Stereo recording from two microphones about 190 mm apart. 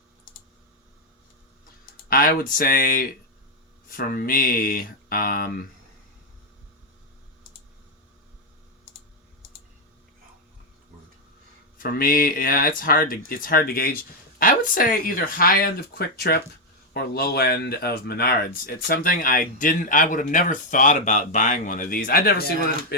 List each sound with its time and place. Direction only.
1.9 s speech: 50° left (ahead or behind)
11.8 s speech: 50° left (ahead or behind)